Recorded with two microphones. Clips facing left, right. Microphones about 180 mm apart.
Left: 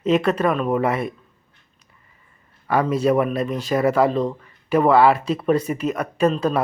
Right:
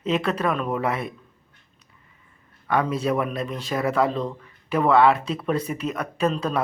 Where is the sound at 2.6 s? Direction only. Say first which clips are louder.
Left 4 dB; 5° left (ahead or behind).